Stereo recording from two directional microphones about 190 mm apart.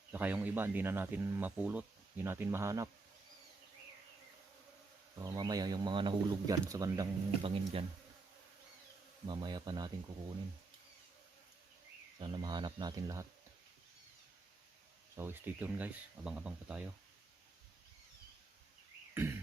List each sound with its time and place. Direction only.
0.1 s speech: 10° right (ahead or behind)
5.2 s speech: 20° right (ahead or behind)
9.2 s speech: 20° right (ahead or behind)
12.2 s speech: 20° right (ahead or behind)
15.1 s speech: 10° right (ahead or behind)
19.1 s a sound: 10° right (ahead or behind)